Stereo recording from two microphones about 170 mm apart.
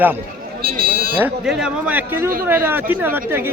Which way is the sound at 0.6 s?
65° right (ahead or behind).